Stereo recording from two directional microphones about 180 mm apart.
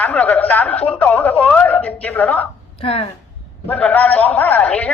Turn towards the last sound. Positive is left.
turn(degrees=10)  # may be behind; listen again after turning